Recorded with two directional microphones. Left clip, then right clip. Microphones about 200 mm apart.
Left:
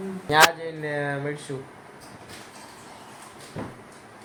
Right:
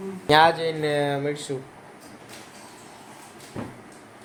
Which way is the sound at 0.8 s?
10° right (ahead or behind).